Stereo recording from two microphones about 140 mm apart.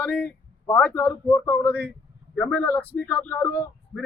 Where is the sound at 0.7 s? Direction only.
15° left (ahead or behind).